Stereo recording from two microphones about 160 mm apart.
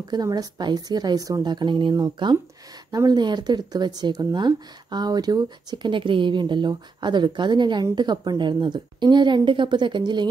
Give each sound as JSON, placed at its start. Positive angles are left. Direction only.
{"t": 0.1, "sound": "speech", "side_deg": -25}